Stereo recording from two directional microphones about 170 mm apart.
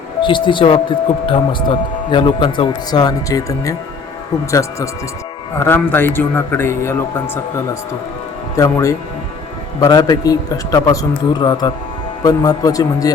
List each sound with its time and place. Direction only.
0.2 s a man's voice: 30° left (ahead or behind)
5.5 s a man's voice: 10° left (ahead or behind)
8.5 s a man's voice: 20° left (ahead or behind)